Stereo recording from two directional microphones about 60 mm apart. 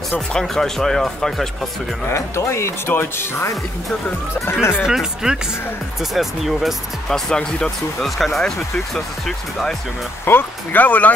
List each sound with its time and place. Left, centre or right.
0.3 s speech: centre
2.0 s speech: left
4.5 s speech: left
4.8 s speech: centre
7.1 s speech: centre
10.2 s speech: left